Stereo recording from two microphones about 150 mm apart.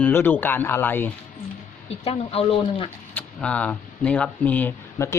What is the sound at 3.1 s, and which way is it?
Speech, 10° left (ahead or behind).